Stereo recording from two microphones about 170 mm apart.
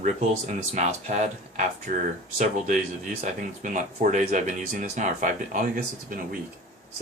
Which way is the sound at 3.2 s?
45° right (ahead or behind).